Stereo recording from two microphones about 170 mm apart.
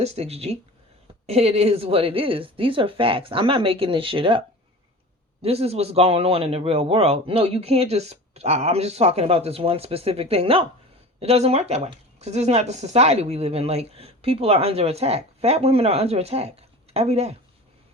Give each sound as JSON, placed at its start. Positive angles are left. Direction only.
{"t": 0.0, "sound": "speech", "side_deg": -40}